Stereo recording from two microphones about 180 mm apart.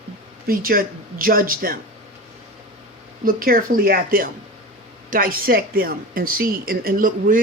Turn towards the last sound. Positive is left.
turn(degrees=-50)  # may be behind; listen again after turning